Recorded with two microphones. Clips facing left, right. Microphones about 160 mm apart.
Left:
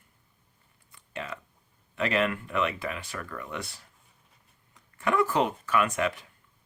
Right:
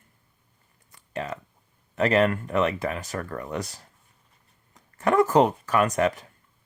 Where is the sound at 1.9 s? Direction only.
40° right (ahead or behind).